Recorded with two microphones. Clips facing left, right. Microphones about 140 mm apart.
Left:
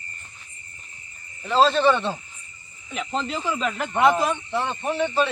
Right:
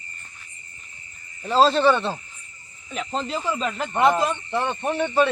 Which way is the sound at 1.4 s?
35° right (ahead or behind).